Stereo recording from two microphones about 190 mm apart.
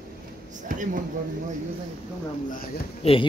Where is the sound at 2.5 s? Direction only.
45° left (ahead or behind).